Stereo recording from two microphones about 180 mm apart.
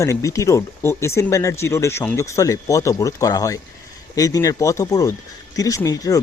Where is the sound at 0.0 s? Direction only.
15° left (ahead or behind).